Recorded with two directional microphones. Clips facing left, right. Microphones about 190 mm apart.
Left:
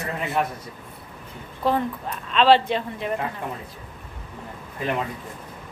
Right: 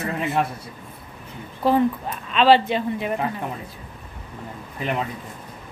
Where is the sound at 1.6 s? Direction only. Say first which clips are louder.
Right 4 dB; 5° right (ahead or behind).